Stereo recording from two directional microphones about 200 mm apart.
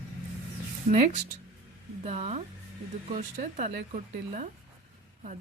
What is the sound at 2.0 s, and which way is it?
A woman's voice, 30° right (ahead or behind).